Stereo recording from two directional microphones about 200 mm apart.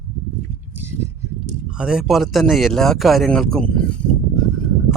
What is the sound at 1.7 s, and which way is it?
Speech, 5° right (ahead or behind).